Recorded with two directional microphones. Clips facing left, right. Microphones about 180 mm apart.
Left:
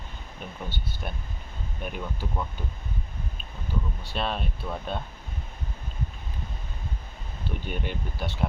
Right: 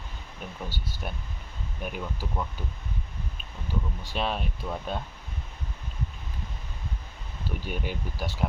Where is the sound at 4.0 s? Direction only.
10° right (ahead or behind).